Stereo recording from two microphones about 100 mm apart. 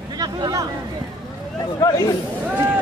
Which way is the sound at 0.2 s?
35° right (ahead or behind).